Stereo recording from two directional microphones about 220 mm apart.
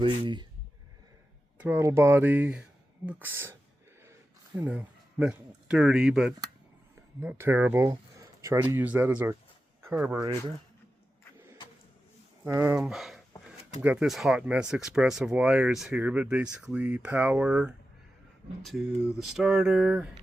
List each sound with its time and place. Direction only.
0.0 s speech: 20° right (ahead or behind)
1.5 s speech: 10° right (ahead or behind)
4.7 s speech: 5° right (ahead or behind)
12.5 s speech: 10° right (ahead or behind)